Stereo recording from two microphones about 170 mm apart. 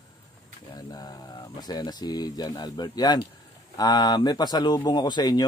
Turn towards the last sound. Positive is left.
turn(degrees=25)  # may be behind; listen again after turning